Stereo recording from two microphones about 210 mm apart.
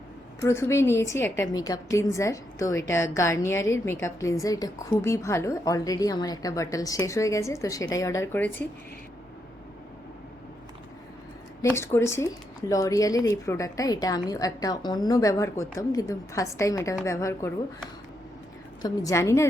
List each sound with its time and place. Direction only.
0.4 s a woman's voice: 10° left (ahead or behind)
11.6 s a woman's voice: 10° left (ahead or behind)
18.8 s a woman's voice: 15° left (ahead or behind)